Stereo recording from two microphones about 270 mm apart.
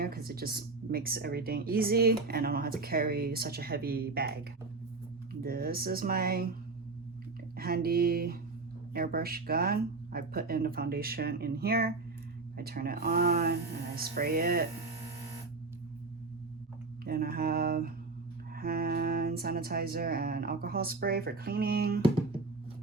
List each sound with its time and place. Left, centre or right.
0.0 s speech: right
7.5 s speech: right
17.0 s speech: right